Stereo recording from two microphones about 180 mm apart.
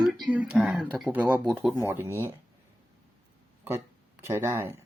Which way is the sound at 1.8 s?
15° right (ahead or behind).